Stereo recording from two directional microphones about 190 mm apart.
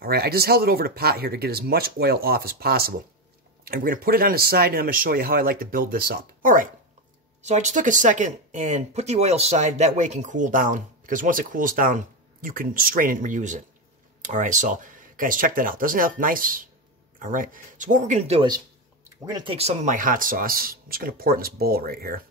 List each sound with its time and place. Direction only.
0.0 s speech: 55° right (ahead or behind); by 18.5 s 35° right (ahead or behind)
19.2 s speech: 20° right (ahead or behind)
19.5 s speech: 35° right (ahead or behind); by 22.2 s 50° right (ahead or behind)